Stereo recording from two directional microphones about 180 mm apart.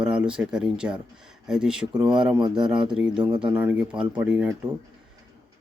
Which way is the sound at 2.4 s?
25° right (ahead or behind).